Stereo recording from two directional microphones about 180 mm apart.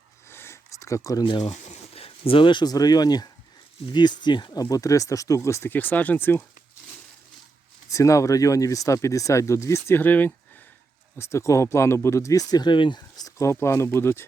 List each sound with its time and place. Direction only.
0.3 s sniff: 15° left (ahead or behind)
1.5 s speech: 40° left (ahead or behind); by 6.4 s 10° left (ahead or behind)
7.9 s speech: 15° left (ahead or behind)